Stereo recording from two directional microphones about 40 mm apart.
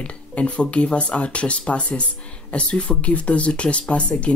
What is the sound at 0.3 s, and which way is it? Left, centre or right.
Speech, left.